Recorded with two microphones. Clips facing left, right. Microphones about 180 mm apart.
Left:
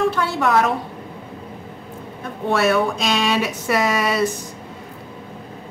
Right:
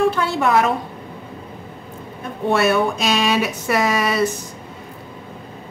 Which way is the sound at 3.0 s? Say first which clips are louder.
Right 1 dB; 5° right (ahead or behind).